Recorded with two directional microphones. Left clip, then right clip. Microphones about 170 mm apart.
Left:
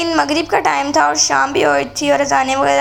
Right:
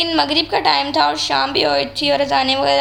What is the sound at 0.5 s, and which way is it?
A woman's voice, 25° left (ahead or behind).